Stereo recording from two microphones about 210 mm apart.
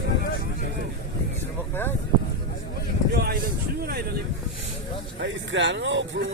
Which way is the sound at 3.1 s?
50° right (ahead or behind).